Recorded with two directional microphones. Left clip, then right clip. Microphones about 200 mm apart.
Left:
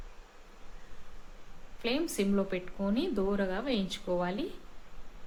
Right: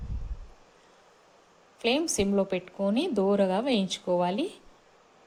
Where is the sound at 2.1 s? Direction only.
25° right (ahead or behind).